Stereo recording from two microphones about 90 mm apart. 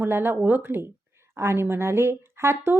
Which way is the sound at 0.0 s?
25° right (ahead or behind).